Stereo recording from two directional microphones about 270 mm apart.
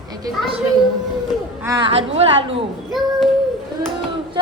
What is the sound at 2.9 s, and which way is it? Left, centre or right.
Speech, centre.